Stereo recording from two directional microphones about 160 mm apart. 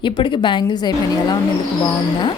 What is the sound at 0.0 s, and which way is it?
A woman's voice, 30° left (ahead or behind).